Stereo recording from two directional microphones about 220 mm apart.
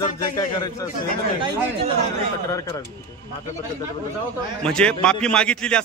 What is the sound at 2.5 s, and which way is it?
Speech, 15° left (ahead or behind).